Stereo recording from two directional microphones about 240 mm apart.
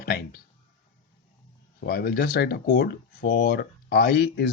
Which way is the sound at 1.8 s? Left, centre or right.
Left.